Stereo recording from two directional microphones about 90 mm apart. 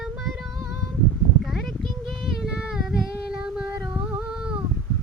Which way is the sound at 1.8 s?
Centre (ahead or behind).